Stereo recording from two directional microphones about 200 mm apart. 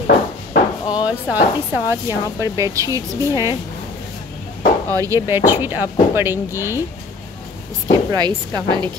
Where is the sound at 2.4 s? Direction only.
15° right (ahead or behind).